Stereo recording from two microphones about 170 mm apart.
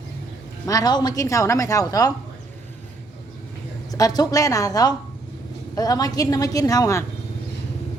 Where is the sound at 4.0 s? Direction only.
20° left (ahead or behind).